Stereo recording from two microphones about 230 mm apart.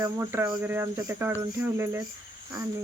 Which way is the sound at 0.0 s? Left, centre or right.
Centre.